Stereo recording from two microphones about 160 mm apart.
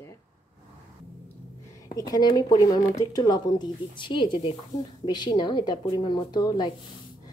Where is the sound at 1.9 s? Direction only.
25° left (ahead or behind).